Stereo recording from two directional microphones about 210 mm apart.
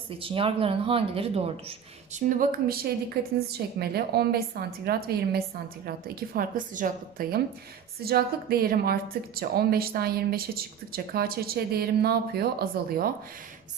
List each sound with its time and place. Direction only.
0.2 s speech: 25° right (ahead or behind)
2.3 s a woman's voice: 40° right (ahead or behind)